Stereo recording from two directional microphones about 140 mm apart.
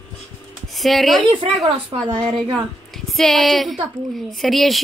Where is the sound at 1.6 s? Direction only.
40° right (ahead or behind).